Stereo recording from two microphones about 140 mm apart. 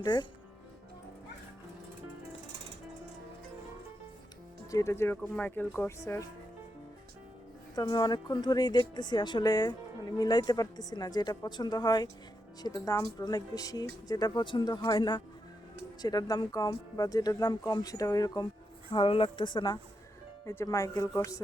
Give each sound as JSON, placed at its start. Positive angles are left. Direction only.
{"t": 0.0, "sound": "speech", "side_deg": 30}
{"t": 4.7, "sound": "speech", "side_deg": 20}
{"t": 7.8, "sound": "speech", "side_deg": 30}
{"t": 18.9, "sound": "speech", "side_deg": 40}